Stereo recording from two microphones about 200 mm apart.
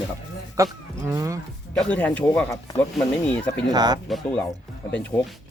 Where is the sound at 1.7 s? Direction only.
5° left (ahead or behind).